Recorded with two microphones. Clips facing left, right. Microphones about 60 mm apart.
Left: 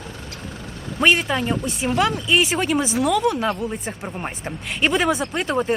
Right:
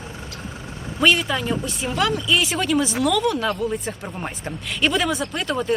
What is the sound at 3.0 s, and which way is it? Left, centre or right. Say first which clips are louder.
A man's voice: left 1 dB; centre.